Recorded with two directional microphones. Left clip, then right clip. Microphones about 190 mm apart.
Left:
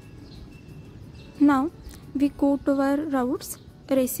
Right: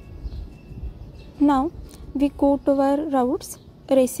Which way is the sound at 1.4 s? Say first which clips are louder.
Right 1 dB; 10° right (ahead or behind).